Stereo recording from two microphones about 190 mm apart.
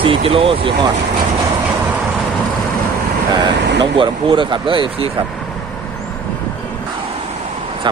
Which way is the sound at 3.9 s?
25° right (ahead or behind).